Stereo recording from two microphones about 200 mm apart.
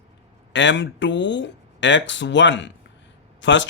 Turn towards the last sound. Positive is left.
turn(degrees=65)  # may be behind; listen again after turning